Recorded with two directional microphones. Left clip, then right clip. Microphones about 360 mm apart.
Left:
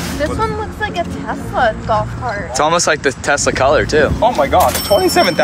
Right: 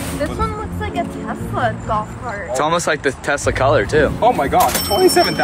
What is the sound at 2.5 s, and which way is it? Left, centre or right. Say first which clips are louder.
Speech: left 3 dB; centre.